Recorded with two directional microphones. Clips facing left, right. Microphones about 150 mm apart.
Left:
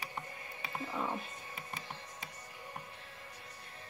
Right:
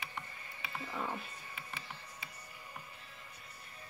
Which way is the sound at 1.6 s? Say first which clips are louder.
Left 2 dB; 40° left (ahead or behind).